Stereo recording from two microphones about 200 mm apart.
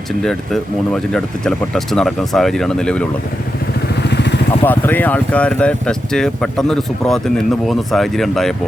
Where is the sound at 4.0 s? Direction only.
60° left (ahead or behind).